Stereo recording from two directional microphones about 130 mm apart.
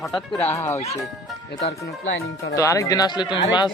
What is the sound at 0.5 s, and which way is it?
Speech, 20° left (ahead or behind).